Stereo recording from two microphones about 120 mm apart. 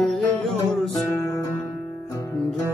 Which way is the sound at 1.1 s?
20° left (ahead or behind).